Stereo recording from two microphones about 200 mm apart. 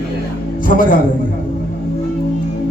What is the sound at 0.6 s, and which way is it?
Speech, 45° left (ahead or behind).